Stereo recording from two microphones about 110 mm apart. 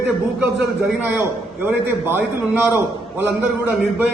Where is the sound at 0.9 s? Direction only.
15° right (ahead or behind).